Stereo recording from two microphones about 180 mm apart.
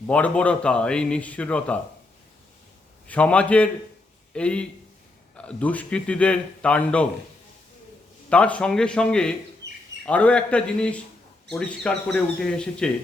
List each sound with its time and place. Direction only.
0.1 s speech: 5° left (ahead or behind)
3.1 s a man's voice: 5° left (ahead or behind)
8.3 s speech: 5° left (ahead or behind)